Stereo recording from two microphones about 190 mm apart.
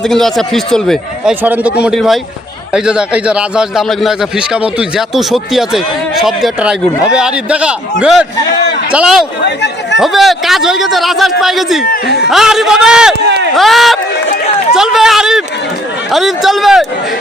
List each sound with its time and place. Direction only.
0.0 s a man's voice: centre (ahead or behind)
9.4 s chatter: 65° left (ahead or behind)
10.0 s a man's voice: centre (ahead or behind)
11.9 s a man's voice: 60° left (ahead or behind)
12.3 s a man's voice: centre (ahead or behind)
13.2 s run: 65° right (ahead or behind)
13.6 s a man's voice: centre (ahead or behind)
14.7 s a sound: centre (ahead or behind)
16.1 s a man's voice: centre (ahead or behind)